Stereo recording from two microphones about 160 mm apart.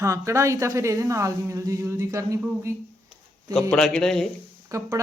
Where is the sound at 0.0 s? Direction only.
20° right (ahead or behind).